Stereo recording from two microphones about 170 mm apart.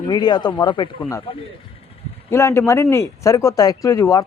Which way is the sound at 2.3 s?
15° left (ahead or behind).